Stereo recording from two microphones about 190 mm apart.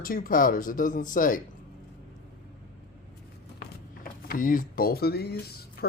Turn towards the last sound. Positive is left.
turn(degrees=55)  # may be behind; listen again after turning